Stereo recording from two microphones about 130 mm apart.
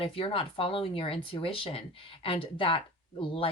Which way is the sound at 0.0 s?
45° left (ahead or behind).